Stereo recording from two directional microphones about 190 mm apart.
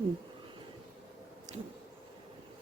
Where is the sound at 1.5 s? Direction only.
40° right (ahead or behind).